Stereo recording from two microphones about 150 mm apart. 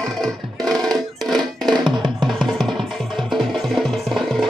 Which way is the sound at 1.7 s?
30° right (ahead or behind).